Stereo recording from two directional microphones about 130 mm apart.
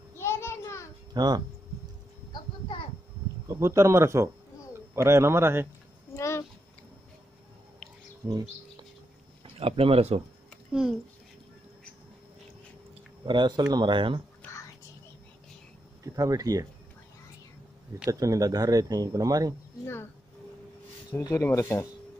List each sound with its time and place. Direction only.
0.2 s a sound: 20° left (ahead or behind)
1.1 s speech: 35° right (ahead or behind)
2.3 s a sound: 40° left (ahead or behind)
3.4 s speech: 20° right (ahead or behind)
6.1 s a sound: 20° left (ahead or behind)
8.2 s speech: 15° right (ahead or behind)
9.6 s speech: 45° right (ahead or behind)
10.7 s a child's voice: 5° right (ahead or behind)
13.2 s speech: 35° right (ahead or behind)
16.0 s speech: 25° right (ahead or behind)
18.2 s speech: 25° right (ahead or behind)
21.2 s speech: 25° left (ahead or behind)